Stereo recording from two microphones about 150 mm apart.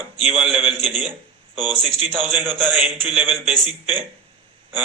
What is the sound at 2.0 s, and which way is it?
A man's voice, centre (ahead or behind).